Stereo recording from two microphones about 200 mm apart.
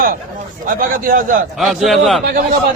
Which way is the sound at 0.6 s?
40° right (ahead or behind).